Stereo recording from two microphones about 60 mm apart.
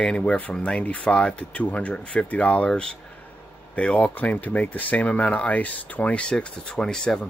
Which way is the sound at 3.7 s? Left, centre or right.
Left.